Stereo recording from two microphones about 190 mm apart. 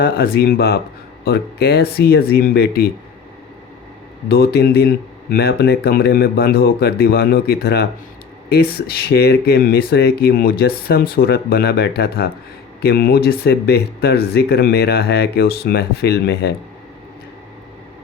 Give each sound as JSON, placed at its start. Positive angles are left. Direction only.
{"t": 0.0, "sound": "speech", "side_deg": 55}
{"t": 4.3, "sound": "speech", "side_deg": 55}